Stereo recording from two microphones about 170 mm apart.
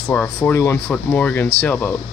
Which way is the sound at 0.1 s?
15° left (ahead or behind).